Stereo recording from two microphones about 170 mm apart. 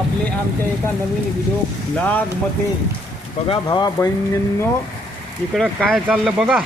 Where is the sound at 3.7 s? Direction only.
20° left (ahead or behind).